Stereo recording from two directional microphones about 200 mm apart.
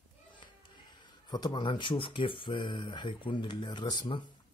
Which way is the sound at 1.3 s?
20° left (ahead or behind).